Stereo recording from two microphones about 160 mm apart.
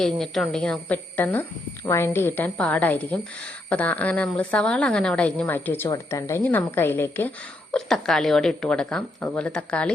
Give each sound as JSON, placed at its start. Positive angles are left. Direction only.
{"t": 0.0, "sound": "a woman's voice", "side_deg": 0}